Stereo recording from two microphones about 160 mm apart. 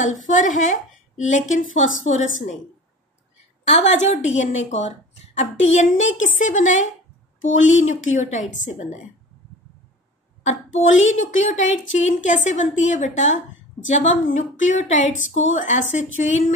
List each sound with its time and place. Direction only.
0.3 s a woman's voice: 55° left (ahead or behind)
3.6 s a woman's voice: 45° left (ahead or behind)
10.4 s a woman's voice: 45° left (ahead or behind)